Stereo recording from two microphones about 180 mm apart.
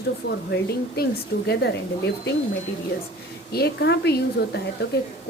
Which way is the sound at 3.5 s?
65° left (ahead or behind).